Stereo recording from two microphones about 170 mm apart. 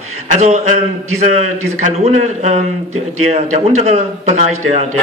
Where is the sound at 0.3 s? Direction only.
45° right (ahead or behind).